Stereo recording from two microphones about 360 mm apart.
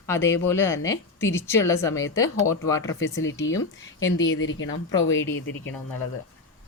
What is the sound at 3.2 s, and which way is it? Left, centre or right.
Speech, left.